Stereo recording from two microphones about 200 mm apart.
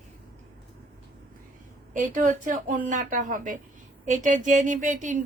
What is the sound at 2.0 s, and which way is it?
Speech, 40° right (ahead or behind).